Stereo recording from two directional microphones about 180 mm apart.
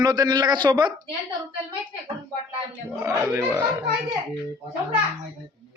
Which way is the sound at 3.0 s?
10° right (ahead or behind).